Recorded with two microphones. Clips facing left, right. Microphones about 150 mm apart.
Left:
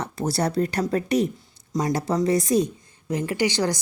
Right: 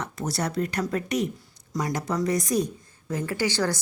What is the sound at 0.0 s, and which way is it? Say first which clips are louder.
A woman's voice: left 4 dB; 30° left (ahead or behind).